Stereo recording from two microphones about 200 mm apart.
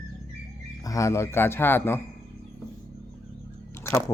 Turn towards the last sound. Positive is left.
turn(degrees=15)  # may be behind; listen again after turning